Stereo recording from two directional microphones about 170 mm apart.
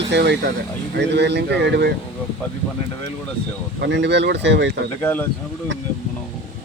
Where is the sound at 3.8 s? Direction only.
90° right.